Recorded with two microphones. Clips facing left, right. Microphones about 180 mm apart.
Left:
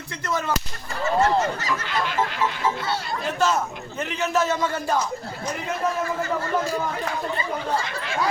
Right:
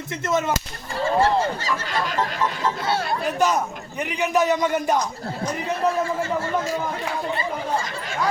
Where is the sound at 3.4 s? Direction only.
15° right (ahead or behind).